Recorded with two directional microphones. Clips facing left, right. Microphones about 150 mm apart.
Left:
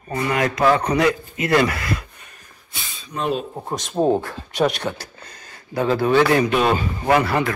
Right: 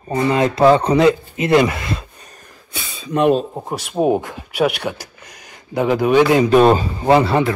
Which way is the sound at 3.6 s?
10° right (ahead or behind).